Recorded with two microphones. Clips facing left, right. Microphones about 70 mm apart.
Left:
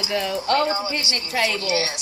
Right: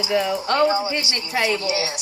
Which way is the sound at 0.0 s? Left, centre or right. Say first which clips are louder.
Right 3 dB; centre.